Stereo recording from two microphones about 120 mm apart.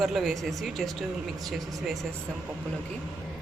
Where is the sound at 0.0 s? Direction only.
Centre (ahead or behind).